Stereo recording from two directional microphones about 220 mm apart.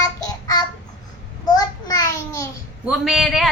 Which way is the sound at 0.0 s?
15° left (ahead or behind).